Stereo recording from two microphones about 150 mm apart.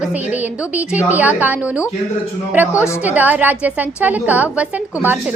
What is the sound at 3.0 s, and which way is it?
A woman's voice, 10° right (ahead or behind).